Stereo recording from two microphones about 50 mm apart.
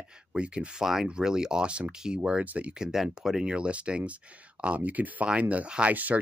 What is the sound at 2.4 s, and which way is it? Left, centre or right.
Speech, right.